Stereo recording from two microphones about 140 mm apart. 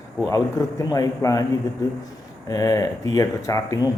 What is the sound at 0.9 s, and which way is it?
Speech, 25° left (ahead or behind).